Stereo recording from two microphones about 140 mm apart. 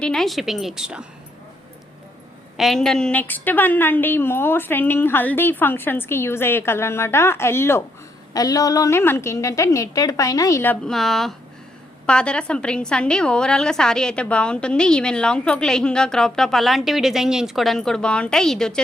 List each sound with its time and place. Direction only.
0.0 s a woman's voice: 5° left (ahead or behind)
2.6 s a woman's voice: centre (ahead or behind); by 10.8 s 20° left (ahead or behind)
10.8 s a woman's voice: centre (ahead or behind)